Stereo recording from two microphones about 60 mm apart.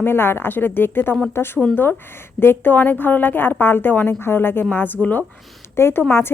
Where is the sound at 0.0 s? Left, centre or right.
Left.